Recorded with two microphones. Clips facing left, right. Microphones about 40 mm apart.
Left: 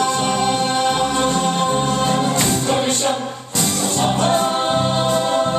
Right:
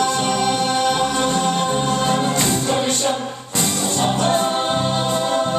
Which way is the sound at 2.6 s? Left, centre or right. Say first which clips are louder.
Left 1 dB; centre.